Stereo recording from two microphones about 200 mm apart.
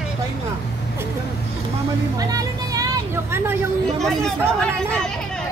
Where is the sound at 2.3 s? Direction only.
15° right (ahead or behind).